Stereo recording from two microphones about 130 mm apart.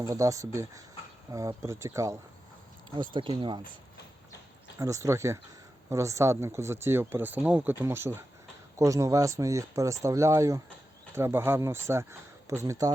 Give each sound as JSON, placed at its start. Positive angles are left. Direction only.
{"t": 0.0, "sound": "speech", "side_deg": -25}
{"t": 2.9, "sound": "speech", "side_deg": -40}
{"t": 4.8, "sound": "speech", "side_deg": -25}